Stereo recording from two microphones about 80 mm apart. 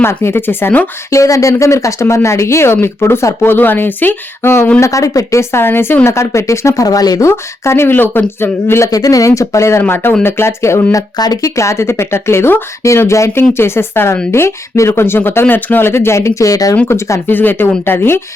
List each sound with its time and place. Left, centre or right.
0.0 s speech: left
1.1 s speech: left
4.8 s speech: left
6.8 s speech: left
7.3 s speech: left
8.9 s speech: left
10.9 s speech: left
16.9 s speech: left